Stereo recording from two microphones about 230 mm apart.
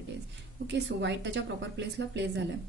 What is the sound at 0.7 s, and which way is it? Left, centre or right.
A woman's voice, right.